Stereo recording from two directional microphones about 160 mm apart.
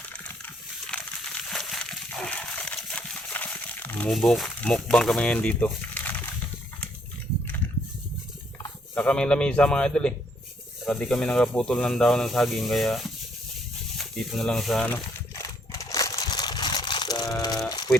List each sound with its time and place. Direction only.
1.5 s dog: centre (ahead or behind)
9.0 s speech: 5° left (ahead or behind)
14.8 s crumpling: 15° left (ahead or behind)
17.7 s a sound: 25° left (ahead or behind)